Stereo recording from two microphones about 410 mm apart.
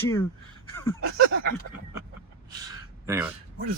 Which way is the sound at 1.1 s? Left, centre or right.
Right.